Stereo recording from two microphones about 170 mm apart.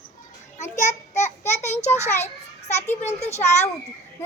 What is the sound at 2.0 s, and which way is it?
A child's voice, 40° left (ahead or behind).